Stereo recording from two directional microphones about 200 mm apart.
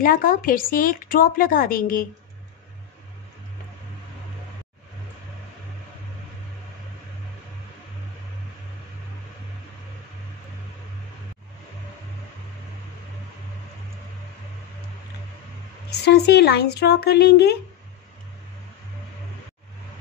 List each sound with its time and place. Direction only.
0.0 s speech: 45° left (ahead or behind)
16.1 s speech: 55° left (ahead or behind)